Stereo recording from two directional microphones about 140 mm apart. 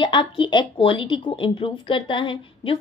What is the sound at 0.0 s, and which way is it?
Speech, 35° left (ahead or behind).